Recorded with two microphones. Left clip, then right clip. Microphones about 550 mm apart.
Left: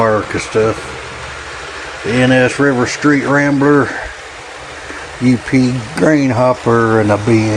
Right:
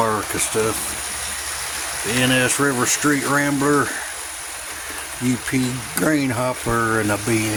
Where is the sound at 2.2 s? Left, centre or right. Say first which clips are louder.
Left 7 dB; right.